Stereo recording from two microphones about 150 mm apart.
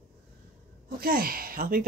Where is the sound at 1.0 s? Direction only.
80° right.